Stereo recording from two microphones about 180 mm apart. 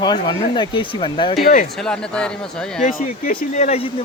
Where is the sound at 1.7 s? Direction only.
5° left (ahead or behind).